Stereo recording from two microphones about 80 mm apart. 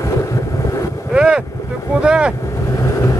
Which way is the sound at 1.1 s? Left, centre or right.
Centre.